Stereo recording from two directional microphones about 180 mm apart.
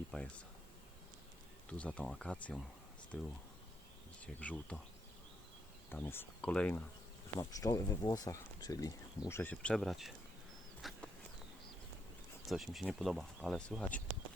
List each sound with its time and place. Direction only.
0.1 s speech: 5° left (ahead or behind)
1.7 s speech: 5° left (ahead or behind)
5.9 s speech: 10° left (ahead or behind)
7.3 s speech: 20° left (ahead or behind); by 10.1 s centre (ahead or behind)
10.8 s walk: centre (ahead or behind)
12.5 s speech: centre (ahead or behind)